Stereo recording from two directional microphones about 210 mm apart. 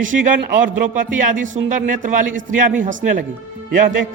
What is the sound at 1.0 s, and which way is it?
A man's voice, 40° right (ahead or behind).